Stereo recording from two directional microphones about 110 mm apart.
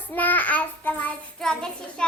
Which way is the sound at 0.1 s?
15° left (ahead or behind).